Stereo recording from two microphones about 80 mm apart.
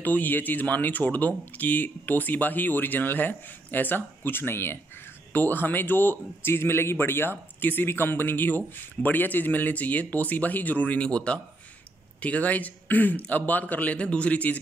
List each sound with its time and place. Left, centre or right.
0.0 s a man's voice: left